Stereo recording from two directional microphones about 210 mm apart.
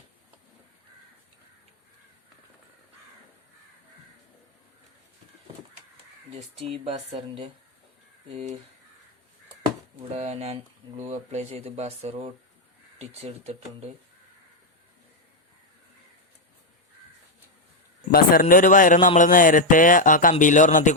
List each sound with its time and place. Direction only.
6.8 s speech: 30° right (ahead or behind)
10.1 s speech: 30° right (ahead or behind)
18.1 s a man's voice: 45° left (ahead or behind)